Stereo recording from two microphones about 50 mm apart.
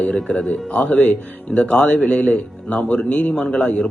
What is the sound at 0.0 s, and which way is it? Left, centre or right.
Speech, centre.